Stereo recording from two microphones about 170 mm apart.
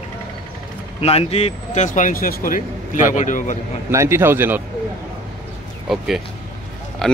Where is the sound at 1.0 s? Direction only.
35° left (ahead or behind).